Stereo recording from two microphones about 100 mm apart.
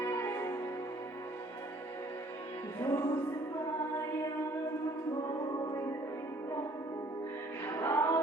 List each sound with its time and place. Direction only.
0.0 s music: 25° left (ahead or behind)
2.8 s music: 40° left (ahead or behind)
7.6 s music: 35° left (ahead or behind)